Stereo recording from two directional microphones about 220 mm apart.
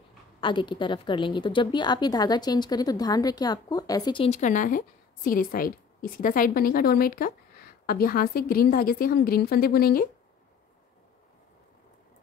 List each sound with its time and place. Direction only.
0.4 s a woman's voice: 20° left (ahead or behind); by 10.0 s 45° left (ahead or behind)